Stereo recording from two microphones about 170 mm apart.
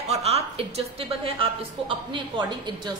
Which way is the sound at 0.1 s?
35° right (ahead or behind).